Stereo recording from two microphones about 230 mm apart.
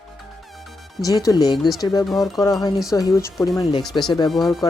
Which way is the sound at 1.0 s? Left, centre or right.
Centre.